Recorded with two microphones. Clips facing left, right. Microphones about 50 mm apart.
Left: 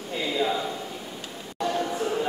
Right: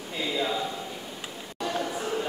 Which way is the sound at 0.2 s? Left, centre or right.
Centre.